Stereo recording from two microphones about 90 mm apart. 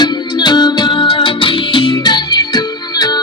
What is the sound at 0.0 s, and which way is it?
Music, 55° left (ahead or behind).